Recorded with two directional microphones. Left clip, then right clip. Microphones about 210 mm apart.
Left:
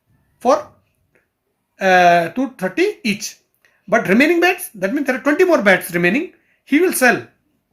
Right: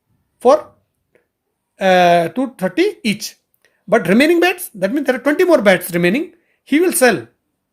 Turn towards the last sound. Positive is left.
turn(degrees=-50)  # may be behind; listen again after turning